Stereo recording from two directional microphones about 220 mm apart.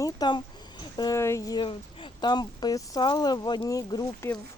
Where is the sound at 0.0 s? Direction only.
20° left (ahead or behind).